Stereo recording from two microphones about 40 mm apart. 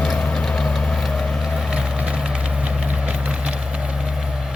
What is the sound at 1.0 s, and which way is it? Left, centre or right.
Vehicle, centre.